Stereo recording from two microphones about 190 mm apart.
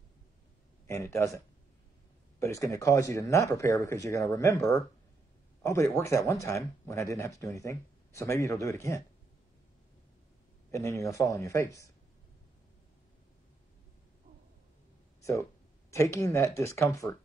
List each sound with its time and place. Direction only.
0.8 s speech: 15° left (ahead or behind)
2.4 s speech: 15° left (ahead or behind)
10.7 s speech: 15° left (ahead or behind)
15.9 s speech: 15° left (ahead or behind)